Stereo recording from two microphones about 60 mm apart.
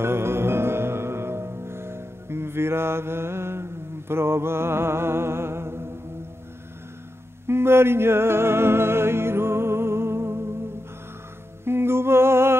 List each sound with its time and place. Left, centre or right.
0.0 s music: right
7.4 s music: right
11.6 s humming: right